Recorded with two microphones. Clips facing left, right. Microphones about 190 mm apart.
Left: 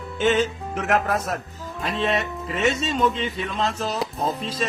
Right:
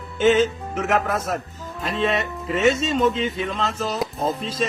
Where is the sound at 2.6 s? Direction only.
40° right (ahead or behind).